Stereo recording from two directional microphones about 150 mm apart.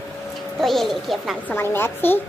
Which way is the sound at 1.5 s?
15° left (ahead or behind).